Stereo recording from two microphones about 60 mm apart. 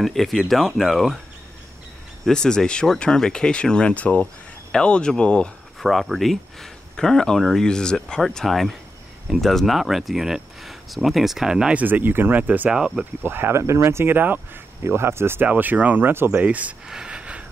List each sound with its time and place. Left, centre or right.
0.0 s speech: centre
2.2 s speech: centre
5.8 s speech: centre
11.7 s speech: right
12.7 s speech: centre
13.2 s speech: right
14.1 s speech: right
14.8 s speech: right
15.4 s speech: right
16.1 s speech: right
16.3 s speech: right
16.8 s a sound: centre